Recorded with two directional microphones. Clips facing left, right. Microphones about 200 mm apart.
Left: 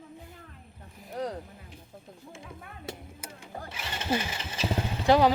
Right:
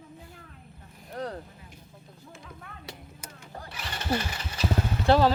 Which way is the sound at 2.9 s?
50° left (ahead or behind).